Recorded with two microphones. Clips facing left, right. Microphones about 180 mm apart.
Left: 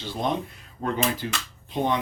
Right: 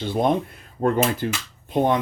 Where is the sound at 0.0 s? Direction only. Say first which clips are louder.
Right 6 dB; 55° right (ahead or behind).